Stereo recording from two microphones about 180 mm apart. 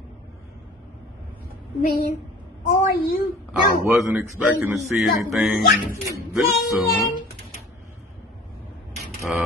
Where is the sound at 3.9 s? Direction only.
10° right (ahead or behind).